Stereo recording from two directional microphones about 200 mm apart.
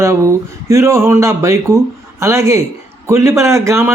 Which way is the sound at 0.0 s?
15° right (ahead or behind).